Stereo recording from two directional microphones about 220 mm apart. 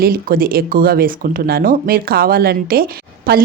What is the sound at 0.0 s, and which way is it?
Speech, 40° right (ahead or behind).